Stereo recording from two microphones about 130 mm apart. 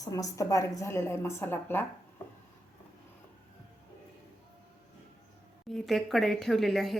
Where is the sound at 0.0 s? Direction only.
30° left (ahead or behind).